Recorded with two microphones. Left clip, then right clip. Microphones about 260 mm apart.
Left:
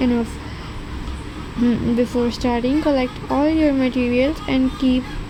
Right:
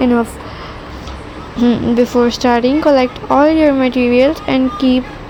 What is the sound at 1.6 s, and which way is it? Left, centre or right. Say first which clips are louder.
Speech: right 7 dB; centre.